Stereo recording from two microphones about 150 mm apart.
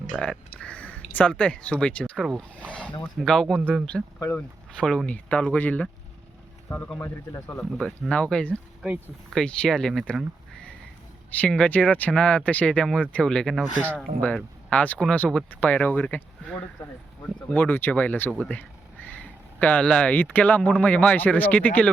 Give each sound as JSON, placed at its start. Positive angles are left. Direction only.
{"t": 0.1, "sound": "speech", "side_deg": 0}
{"t": 0.6, "sound": "speech", "side_deg": 10}
{"t": 7.6, "sound": "speech", "side_deg": 5}
{"t": 17.5, "sound": "speech", "side_deg": 15}